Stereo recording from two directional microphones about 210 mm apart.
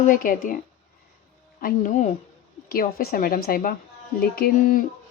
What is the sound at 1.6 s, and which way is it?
Speech, 40° left (ahead or behind).